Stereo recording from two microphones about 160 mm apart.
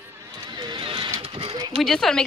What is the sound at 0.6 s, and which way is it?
Vehicle, 30° right (ahead or behind).